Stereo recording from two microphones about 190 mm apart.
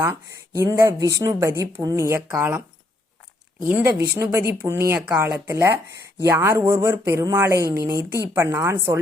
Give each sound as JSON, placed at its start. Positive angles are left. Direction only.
{"t": 0.0, "sound": "speech", "side_deg": -15}
{"t": 3.7, "sound": "speech", "side_deg": -10}